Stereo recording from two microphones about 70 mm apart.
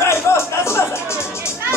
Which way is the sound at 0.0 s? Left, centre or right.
Left.